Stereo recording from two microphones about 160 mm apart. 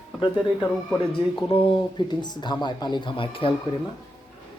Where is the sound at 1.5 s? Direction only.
35° left (ahead or behind).